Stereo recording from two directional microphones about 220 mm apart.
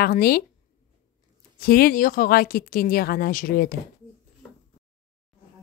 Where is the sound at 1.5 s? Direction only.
45° left (ahead or behind).